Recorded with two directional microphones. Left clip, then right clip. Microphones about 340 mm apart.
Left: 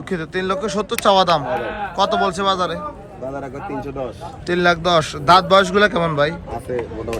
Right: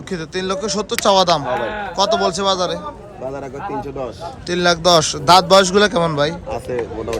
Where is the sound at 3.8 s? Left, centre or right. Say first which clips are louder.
Right 1 dB; centre.